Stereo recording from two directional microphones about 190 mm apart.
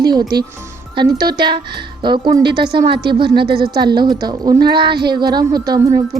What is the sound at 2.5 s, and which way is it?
Speech, 60° right (ahead or behind).